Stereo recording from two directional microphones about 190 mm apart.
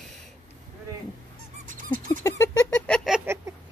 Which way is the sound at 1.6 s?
45° right (ahead or behind).